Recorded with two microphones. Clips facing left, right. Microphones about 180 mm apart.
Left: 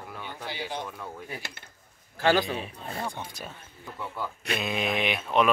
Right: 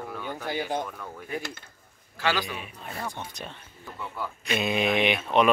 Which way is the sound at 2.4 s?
30° left (ahead or behind).